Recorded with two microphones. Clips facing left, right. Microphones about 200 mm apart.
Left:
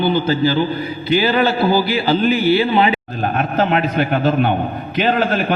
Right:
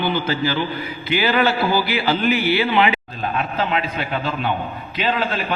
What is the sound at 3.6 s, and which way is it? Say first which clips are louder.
A man's voice: left 9 dB; 50° left (ahead or behind).